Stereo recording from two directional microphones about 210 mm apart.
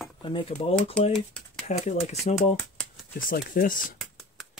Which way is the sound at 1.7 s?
35° left (ahead or behind).